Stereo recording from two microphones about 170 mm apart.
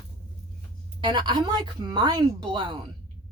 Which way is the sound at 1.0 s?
25° right (ahead or behind).